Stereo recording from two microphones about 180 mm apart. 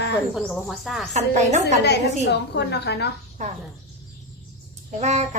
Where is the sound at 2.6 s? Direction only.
70° left (ahead or behind).